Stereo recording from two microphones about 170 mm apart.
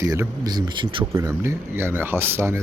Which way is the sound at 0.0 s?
20° right (ahead or behind).